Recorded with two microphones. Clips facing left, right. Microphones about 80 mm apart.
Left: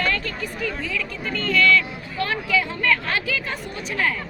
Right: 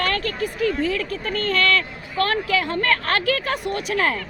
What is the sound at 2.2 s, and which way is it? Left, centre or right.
Speech, right.